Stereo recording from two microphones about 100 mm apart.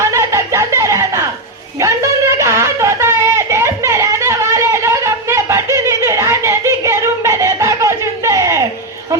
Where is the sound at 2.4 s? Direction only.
30° right (ahead or behind).